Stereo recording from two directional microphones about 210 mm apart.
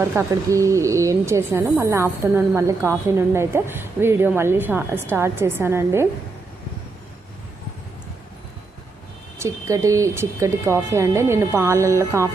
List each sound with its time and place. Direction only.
0.0 s speech: 10° right (ahead or behind)
9.4 s speech: 15° right (ahead or behind)